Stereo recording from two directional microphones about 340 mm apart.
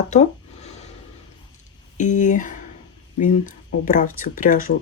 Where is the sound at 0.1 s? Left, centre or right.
Centre.